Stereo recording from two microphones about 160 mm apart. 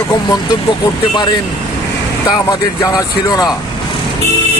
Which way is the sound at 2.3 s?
25° left (ahead or behind).